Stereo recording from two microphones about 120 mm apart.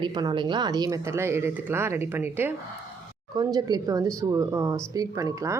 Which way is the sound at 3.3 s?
35° right (ahead or behind).